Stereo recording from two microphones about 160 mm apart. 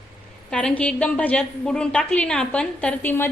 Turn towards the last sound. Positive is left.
turn(degrees=15)  # may be behind; listen again after turning